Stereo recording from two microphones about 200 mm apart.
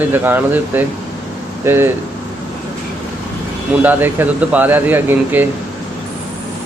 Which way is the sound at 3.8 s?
10° right (ahead or behind).